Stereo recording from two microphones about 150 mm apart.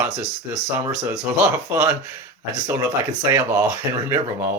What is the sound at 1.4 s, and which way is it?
Speech, 10° right (ahead or behind).